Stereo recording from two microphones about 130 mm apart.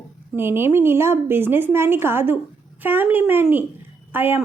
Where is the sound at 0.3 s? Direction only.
20° right (ahead or behind).